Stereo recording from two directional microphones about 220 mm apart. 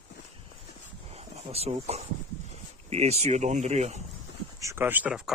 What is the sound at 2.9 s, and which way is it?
Speech, 30° right (ahead or behind).